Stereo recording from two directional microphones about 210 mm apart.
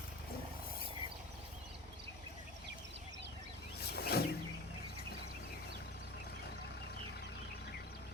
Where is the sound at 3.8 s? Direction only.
50° left (ahead or behind).